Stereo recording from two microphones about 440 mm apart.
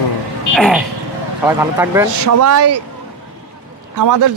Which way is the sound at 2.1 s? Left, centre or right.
Right.